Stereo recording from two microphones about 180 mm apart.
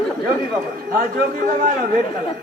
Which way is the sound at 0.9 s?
50° right (ahead or behind).